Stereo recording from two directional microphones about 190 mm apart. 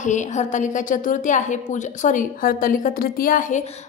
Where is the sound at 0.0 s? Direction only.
40° left (ahead or behind).